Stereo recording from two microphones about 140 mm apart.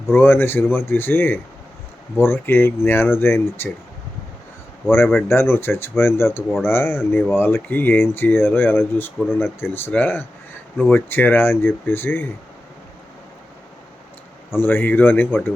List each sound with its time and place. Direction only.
0.1 s speech: 15° left (ahead or behind)
4.9 s speech: 15° left (ahead or behind)
14.5 s speech: 15° left (ahead or behind)